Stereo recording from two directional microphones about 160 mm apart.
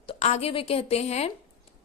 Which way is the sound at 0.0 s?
40° left (ahead or behind).